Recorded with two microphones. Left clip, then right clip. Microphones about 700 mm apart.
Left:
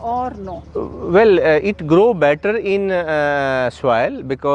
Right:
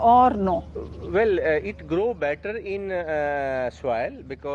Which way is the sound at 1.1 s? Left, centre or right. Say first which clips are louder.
Left 9 dB; left.